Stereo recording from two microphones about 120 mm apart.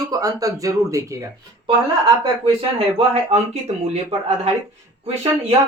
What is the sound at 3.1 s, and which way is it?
Speech, 60° right (ahead or behind).